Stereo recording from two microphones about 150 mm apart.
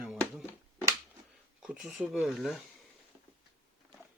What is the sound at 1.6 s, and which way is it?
Speech, 5° right (ahead or behind).